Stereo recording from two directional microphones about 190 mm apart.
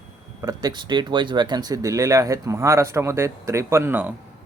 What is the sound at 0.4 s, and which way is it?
Speech, 20° right (ahead or behind).